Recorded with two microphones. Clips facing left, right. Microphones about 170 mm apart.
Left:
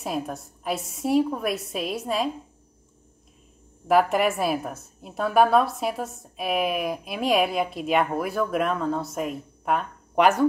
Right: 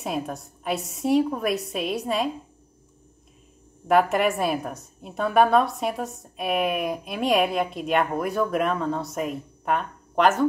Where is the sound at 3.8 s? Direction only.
Centre (ahead or behind).